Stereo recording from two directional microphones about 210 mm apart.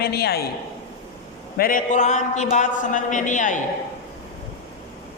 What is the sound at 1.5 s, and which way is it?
A man's voice, 45° left (ahead or behind).